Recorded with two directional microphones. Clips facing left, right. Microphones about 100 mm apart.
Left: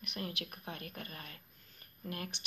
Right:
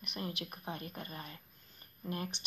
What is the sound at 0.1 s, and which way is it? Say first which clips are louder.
Speech: right 1 dB; 25° right (ahead or behind).